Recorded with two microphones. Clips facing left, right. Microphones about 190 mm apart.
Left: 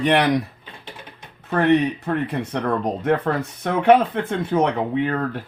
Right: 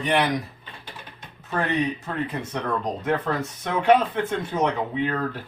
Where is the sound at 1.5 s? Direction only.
60° left (ahead or behind).